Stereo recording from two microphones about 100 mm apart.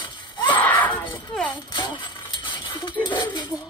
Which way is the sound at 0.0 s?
55° left (ahead or behind).